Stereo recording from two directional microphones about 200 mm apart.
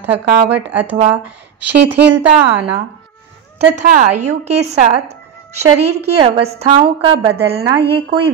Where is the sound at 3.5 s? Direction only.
40° right (ahead or behind).